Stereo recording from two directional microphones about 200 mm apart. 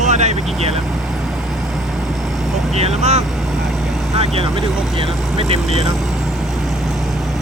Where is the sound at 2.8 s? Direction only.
35° right (ahead or behind).